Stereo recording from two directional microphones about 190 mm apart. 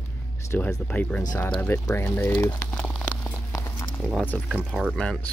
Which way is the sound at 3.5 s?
15° left (ahead or behind).